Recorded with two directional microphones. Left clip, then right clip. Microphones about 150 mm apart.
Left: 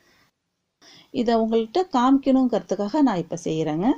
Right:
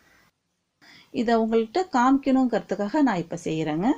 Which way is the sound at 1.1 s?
35° left (ahead or behind).